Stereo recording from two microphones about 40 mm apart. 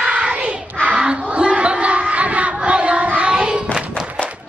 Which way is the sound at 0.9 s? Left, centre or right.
Right.